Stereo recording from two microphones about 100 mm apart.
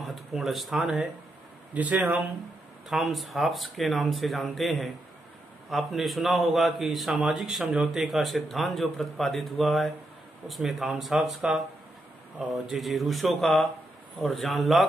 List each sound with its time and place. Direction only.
0.0 s a man's voice: centre (ahead or behind)
2.9 s a man's voice: centre (ahead or behind)